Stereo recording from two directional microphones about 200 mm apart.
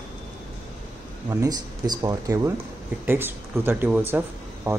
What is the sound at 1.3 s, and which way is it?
Speech, 20° right (ahead or behind).